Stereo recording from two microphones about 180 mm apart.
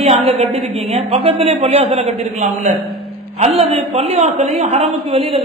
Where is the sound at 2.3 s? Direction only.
40° right (ahead or behind).